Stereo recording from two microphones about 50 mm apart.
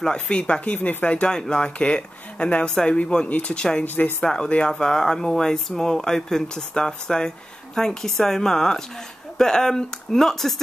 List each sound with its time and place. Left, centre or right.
0.0 s speech: centre
1.3 s speech: centre
3.8 s speech: left
4.2 s speech: centre